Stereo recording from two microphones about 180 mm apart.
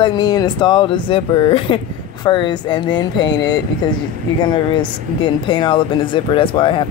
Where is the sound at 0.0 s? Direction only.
25° left (ahead or behind).